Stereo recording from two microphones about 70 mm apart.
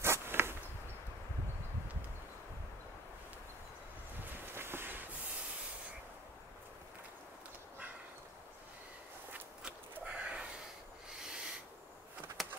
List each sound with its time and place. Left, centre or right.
0.0 s insect: right
4.6 s train: right
10.0 s a sound: centre
11.1 s owl: centre
12.4 s clip-clop: centre